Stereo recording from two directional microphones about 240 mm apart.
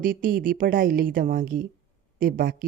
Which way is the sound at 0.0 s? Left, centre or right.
Right.